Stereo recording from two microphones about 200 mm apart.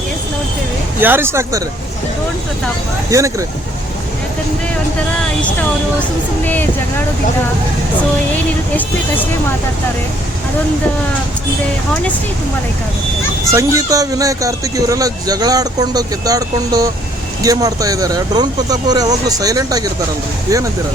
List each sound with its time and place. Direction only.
1.0 s speech: 10° right (ahead or behind)
3.1 s speech: 15° right (ahead or behind)
6.4 s speech: 10° left (ahead or behind)
13.5 s speech: 15° right (ahead or behind)